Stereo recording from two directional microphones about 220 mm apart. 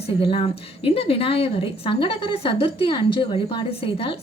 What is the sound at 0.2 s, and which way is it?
Speech, 25° left (ahead or behind).